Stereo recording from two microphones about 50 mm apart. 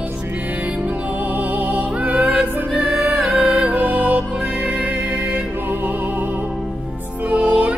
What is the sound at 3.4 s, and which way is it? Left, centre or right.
Music, centre.